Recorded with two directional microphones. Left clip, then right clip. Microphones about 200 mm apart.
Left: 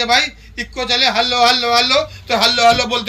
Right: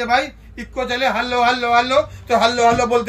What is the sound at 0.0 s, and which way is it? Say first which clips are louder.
A man's voice: left 3 dB; 15° right (ahead or behind).